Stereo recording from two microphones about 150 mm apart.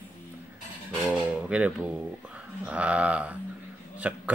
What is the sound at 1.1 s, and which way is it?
Speech, 10° right (ahead or behind).